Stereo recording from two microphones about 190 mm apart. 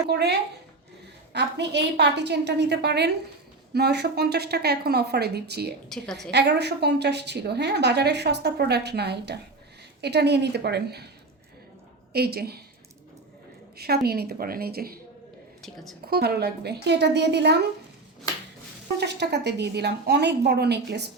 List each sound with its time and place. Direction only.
0.1 s a woman's voice: 60° right (ahead or behind)
12.1 s a woman's voice: 55° right (ahead or behind)
13.7 s a woman's voice: 55° right (ahead or behind)
15.6 s a woman's voice: centre (ahead or behind)
16.0 s a woman's voice: 55° right (ahead or behind)
18.9 s a woman's voice: 60° right (ahead or behind)